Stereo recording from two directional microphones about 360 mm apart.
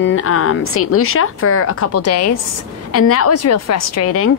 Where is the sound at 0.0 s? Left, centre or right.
Left.